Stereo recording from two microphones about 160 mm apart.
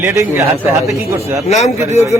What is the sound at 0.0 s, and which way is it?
A man's voice, 20° right (ahead or behind).